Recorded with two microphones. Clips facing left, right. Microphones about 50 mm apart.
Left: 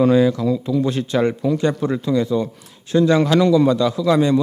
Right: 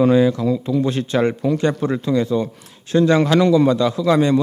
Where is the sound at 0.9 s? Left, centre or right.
Right.